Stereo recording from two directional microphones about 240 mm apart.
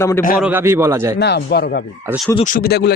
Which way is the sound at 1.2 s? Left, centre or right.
Left.